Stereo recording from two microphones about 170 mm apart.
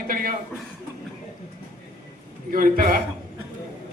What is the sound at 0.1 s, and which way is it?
Chuckle, 55° right (ahead or behind).